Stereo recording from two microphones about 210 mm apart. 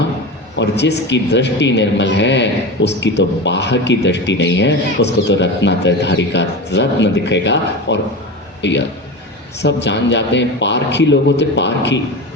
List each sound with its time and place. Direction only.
0.5 s speech: 55° left (ahead or behind)